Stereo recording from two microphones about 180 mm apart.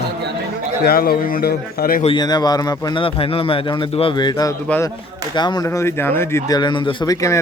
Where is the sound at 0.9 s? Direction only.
55° left (ahead or behind).